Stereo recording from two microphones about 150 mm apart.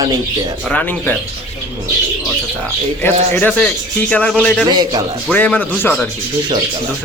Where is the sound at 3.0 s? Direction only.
10° left (ahead or behind).